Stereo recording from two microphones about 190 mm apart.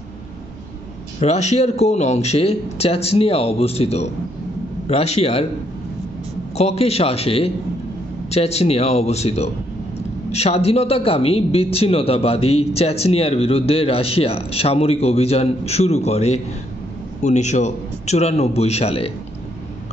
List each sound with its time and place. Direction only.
1.2 s a man's voice: 35° left (ahead or behind)
6.5 s a man's voice: 35° left (ahead or behind)